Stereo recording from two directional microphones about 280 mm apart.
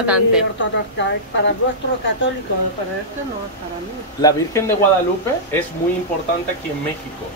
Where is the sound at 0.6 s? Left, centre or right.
Left.